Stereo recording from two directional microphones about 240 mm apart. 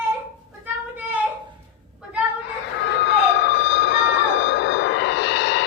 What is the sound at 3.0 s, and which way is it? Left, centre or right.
Emergency vehicle, left.